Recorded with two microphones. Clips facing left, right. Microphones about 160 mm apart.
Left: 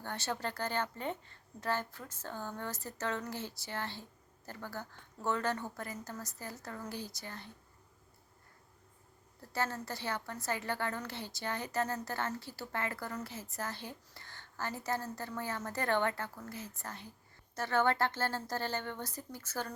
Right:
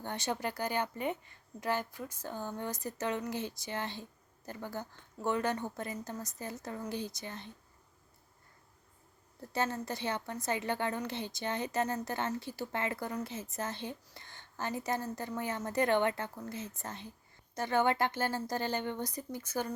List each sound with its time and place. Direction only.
0.0 s a woman's voice: 20° right (ahead or behind)
9.5 s a woman's voice: 15° right (ahead or behind)